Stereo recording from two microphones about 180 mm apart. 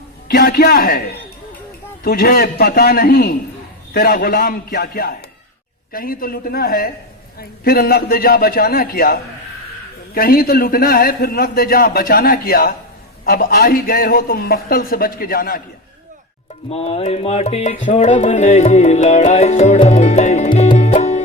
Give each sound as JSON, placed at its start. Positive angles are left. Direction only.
{"t": 0.3, "sound": "a man's voice", "side_deg": 60}
{"t": 2.0, "sound": "a man's voice", "side_deg": 55}
{"t": 16.6, "sound": "music", "side_deg": 35}